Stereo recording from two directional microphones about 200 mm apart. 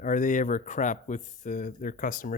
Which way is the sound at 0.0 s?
40° left (ahead or behind).